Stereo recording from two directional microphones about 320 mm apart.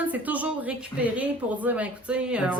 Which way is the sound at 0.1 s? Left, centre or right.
Centre.